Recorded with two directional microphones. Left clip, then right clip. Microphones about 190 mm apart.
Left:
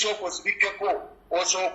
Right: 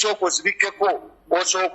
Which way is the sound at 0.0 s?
45° right (ahead or behind).